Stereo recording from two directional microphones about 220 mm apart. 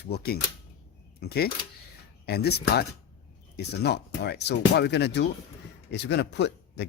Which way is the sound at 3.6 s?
50° left (ahead or behind).